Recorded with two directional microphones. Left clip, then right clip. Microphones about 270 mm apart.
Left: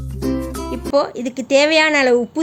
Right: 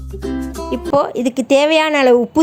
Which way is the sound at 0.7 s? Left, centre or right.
Centre.